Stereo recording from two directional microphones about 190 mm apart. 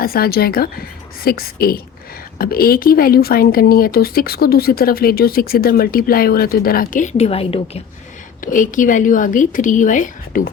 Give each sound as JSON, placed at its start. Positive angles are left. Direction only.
{"t": 0.0, "sound": "speech", "side_deg": 50}
{"t": 8.4, "sound": "speech", "side_deg": 45}